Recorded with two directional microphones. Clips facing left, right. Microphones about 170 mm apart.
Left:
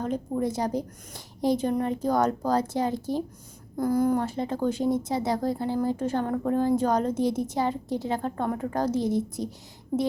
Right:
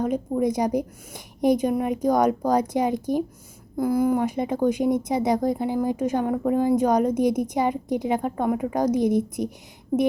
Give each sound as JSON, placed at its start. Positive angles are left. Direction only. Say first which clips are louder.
{"t": 0.0, "sound": "speech", "louder": "right 5 dB", "side_deg": -10}